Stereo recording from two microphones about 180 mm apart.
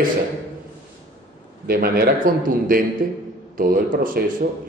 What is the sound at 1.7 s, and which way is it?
A man's voice, 60° right (ahead or behind).